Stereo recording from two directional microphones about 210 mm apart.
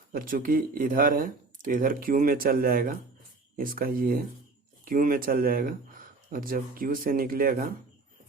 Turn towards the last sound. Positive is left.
turn(degrees=-40)  # may be behind; listen again after turning